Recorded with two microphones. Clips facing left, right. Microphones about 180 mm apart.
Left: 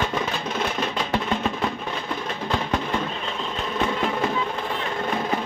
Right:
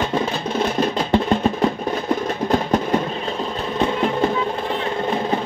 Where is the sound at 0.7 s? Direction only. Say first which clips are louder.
Right 7 dB; 35° right (ahead or behind).